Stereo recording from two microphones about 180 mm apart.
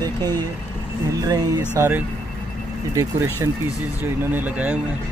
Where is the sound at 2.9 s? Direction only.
15° right (ahead or behind).